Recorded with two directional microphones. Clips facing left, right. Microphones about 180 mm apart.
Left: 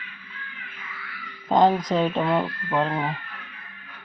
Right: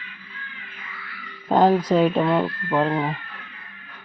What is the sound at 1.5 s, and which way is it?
Speech, 5° right (ahead or behind).